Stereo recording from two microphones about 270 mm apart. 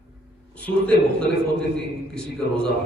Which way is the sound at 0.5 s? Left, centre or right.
Centre.